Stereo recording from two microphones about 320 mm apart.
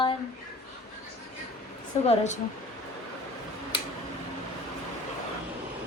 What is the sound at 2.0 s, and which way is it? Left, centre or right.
Speech, left.